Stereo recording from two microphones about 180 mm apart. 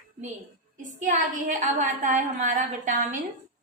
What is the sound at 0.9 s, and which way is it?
A woman's voice, 45° right (ahead or behind).